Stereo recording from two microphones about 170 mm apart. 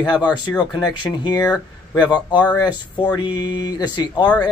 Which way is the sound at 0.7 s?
25° left (ahead or behind).